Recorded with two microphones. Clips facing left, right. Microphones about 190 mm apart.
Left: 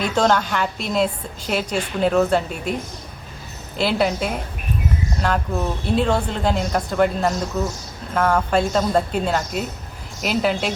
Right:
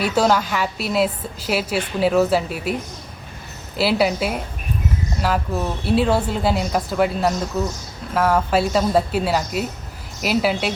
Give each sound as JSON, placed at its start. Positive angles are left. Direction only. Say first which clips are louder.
{"t": 0.0, "sound": "a woman's voice", "louder": "right 1 dB", "side_deg": -5}
{"t": 3.8, "sound": "a woman's voice", "louder": "right 1 dB", "side_deg": -5}